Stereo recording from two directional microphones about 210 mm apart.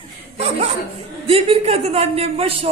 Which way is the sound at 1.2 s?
25° right (ahead or behind).